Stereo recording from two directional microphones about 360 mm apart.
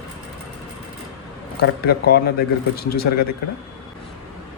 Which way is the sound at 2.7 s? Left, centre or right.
Left.